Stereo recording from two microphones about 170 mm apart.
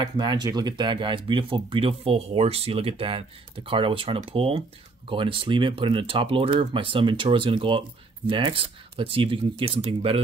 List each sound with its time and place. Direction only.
0.0 s speech: 25° right (ahead or behind)